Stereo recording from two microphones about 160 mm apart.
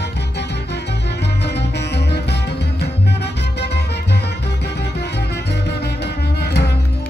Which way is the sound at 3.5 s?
90° left.